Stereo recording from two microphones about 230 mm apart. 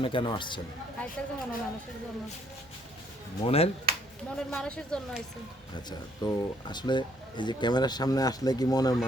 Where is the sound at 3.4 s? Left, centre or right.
Left.